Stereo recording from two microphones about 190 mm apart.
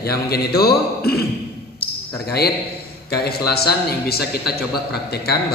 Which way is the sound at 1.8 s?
55° left (ahead or behind).